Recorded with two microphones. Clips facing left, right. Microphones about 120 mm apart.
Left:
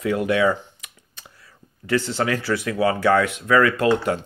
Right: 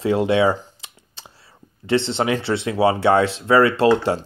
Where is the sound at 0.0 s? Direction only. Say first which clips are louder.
Right 3 dB; 25° right (ahead or behind).